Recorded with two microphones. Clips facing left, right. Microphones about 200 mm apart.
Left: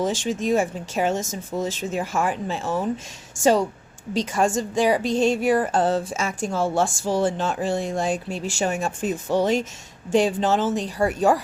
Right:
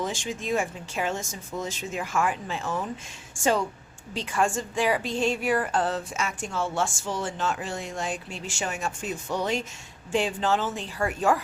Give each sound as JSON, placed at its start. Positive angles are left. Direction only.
{"t": 0.3, "sound": "a woman's voice", "side_deg": 40}
{"t": 4.4, "sound": "a woman's voice", "side_deg": 15}
{"t": 4.8, "sound": "a woman's voice", "side_deg": 40}
{"t": 5.6, "sound": "a woman's voice", "side_deg": 30}